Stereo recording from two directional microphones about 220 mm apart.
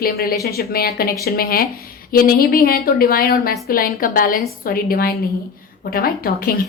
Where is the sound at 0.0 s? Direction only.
45° left (ahead or behind).